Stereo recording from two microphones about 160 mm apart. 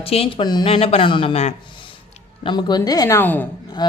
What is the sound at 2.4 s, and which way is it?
A woman's voice, 25° left (ahead or behind).